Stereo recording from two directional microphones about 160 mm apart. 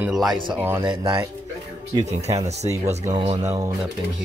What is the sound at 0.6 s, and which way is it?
Speech, 15° right (ahead or behind).